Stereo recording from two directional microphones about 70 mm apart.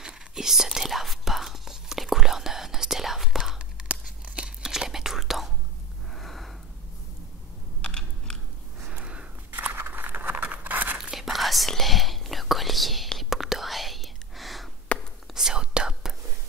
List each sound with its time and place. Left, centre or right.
0.0 s whispering: centre
6.1 s a sound: centre
7.8 s computer keyboard: centre
8.8 s a sound: centre
11.0 s whispering: centre
14.9 s whispering: centre
15.3 s whispering: centre